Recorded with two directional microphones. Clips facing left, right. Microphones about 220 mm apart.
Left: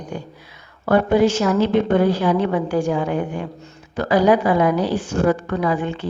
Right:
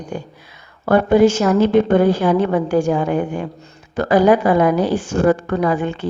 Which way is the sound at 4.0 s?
50° right (ahead or behind).